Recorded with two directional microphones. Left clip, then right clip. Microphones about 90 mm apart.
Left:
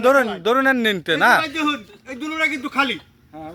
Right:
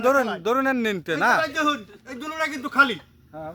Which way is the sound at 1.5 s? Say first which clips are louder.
Left 1 dB; 35° right (ahead or behind).